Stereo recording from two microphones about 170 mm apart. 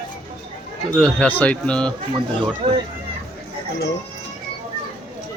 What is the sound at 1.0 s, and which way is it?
Speech, 5° left (ahead or behind).